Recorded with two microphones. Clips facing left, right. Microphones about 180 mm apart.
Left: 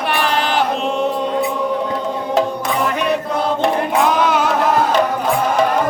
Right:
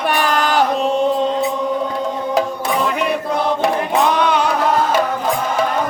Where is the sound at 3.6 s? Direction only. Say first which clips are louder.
Left 1 dB; centre (ahead or behind).